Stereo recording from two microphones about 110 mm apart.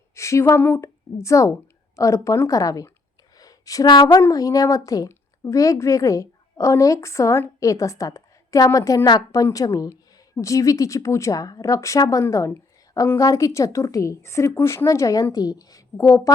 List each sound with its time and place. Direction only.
0.1 s a woman's voice: 25° left (ahead or behind)
3.3 s a sound: 35° left (ahead or behind)
4.0 s a woman's voice: 30° left (ahead or behind)